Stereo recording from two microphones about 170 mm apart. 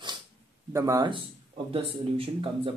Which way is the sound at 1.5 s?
35° right (ahead or behind).